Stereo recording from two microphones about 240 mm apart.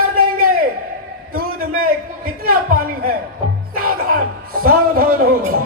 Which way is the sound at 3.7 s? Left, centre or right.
Right.